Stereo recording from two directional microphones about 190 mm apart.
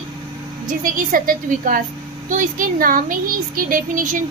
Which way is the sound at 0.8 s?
45° right (ahead or behind).